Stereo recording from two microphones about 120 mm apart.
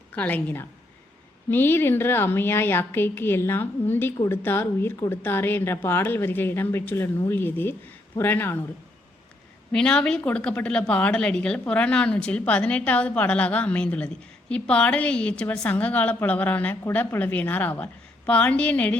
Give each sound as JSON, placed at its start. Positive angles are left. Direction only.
{"t": 0.1, "sound": "a woman's voice", "side_deg": 15}
{"t": 9.7, "sound": "a woman's voice", "side_deg": 5}